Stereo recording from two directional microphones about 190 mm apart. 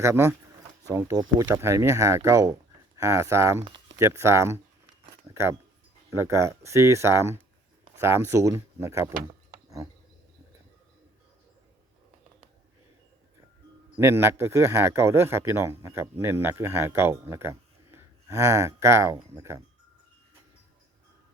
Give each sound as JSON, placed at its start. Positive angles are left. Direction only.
{"t": 0.0, "sound": "a man's voice", "side_deg": -15}
{"t": 14.0, "sound": "a man's voice", "side_deg": -15}